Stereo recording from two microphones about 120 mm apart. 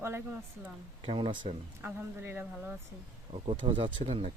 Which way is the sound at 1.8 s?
20° right (ahead or behind).